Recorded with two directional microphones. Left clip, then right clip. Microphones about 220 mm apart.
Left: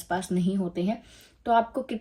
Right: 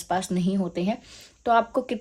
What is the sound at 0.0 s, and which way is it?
Speech, 35° right (ahead or behind).